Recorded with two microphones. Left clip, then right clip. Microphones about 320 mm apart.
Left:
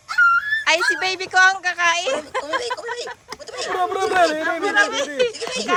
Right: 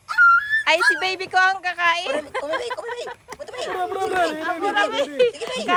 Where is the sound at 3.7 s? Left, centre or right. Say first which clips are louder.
Left 5 dB; left.